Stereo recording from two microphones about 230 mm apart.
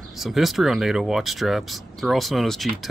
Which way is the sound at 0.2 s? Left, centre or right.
Centre.